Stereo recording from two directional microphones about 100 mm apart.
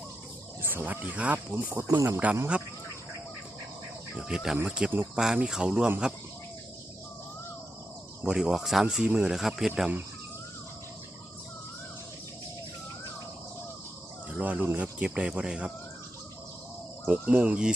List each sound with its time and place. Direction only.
0.6 s speech: 20° right (ahead or behind)
1.5 s speech: 25° right (ahead or behind)
4.2 s speech: 5° right (ahead or behind)
8.2 s speech: 5° right (ahead or behind)
14.3 s speech: 15° right (ahead or behind)
17.1 s speech: 15° right (ahead or behind)